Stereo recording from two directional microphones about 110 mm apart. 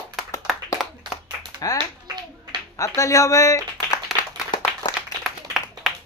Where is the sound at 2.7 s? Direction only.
30° left (ahead or behind).